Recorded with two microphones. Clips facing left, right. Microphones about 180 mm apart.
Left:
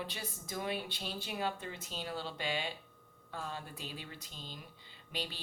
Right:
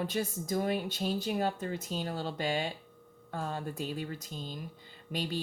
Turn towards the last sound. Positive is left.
turn(degrees=-45)  # may be behind; listen again after turning